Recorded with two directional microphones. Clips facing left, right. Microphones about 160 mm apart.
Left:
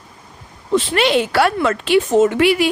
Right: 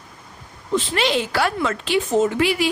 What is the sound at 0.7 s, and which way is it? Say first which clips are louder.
A woman's voice: left 5 dB; 65° left (ahead or behind).